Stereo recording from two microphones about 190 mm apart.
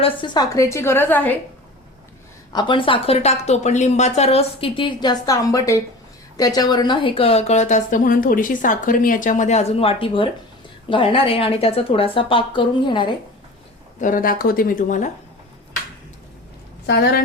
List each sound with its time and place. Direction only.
0.0 s a woman's voice: 25° left (ahead or behind); by 1.4 s 10° left (ahead or behind)
2.5 s a woman's voice: 25° left (ahead or behind)
14.0 s speech: 45° left (ahead or behind)
16.8 s a woman's voice: 65° left (ahead or behind)